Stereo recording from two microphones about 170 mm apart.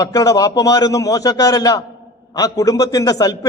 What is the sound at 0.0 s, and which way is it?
A man's voice, 20° left (ahead or behind).